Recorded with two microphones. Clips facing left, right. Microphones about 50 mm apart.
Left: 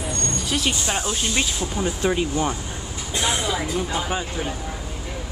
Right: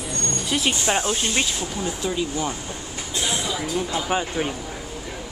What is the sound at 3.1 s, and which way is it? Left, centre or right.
Vehicle, left.